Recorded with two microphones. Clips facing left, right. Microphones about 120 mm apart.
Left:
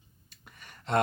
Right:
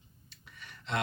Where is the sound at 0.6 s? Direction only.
45° left (ahead or behind).